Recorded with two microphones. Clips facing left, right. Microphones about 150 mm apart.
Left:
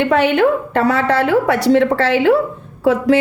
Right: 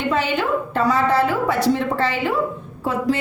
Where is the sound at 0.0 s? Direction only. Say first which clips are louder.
Left 8 dB; 65° left (ahead or behind).